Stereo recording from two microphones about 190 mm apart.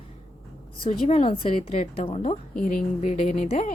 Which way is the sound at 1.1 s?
30° left (ahead or behind).